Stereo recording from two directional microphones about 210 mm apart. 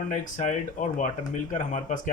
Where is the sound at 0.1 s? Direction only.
35° left (ahead or behind).